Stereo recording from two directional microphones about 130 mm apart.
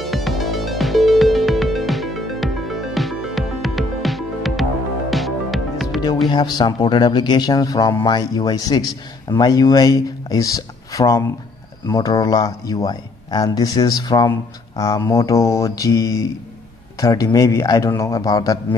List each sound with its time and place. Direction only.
0.0 s music: centre (ahead or behind)
6.3 s a man's voice: 35° left (ahead or behind)